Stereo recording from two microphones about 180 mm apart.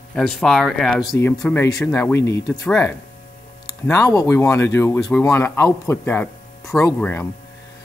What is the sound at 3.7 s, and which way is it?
Speech, 15° left (ahead or behind).